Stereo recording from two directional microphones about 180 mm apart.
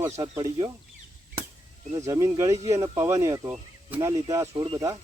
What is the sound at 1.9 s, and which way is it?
Speech, 20° right (ahead or behind).